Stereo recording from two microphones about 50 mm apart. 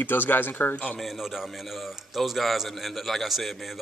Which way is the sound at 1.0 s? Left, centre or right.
Centre.